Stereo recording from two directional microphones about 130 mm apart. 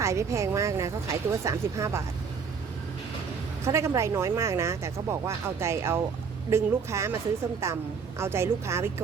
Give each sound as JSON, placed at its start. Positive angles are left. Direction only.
{"t": 0.0, "sound": "speech", "side_deg": -20}
{"t": 3.6, "sound": "speech", "side_deg": -20}